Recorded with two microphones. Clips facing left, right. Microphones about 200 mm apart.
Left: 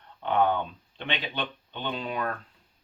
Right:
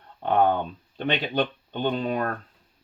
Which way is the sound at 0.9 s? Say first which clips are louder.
Right 8 dB; 40° right (ahead or behind).